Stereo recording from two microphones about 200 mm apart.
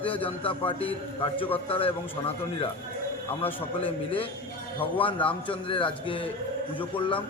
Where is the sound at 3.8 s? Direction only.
25° left (ahead or behind).